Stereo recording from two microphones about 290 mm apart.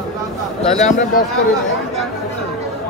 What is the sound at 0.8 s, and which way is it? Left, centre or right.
Speech, left.